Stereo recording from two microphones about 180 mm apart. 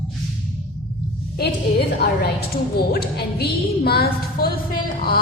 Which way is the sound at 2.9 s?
60° left (ahead or behind).